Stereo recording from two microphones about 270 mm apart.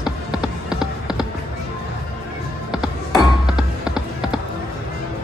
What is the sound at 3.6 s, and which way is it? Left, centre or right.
Music, centre.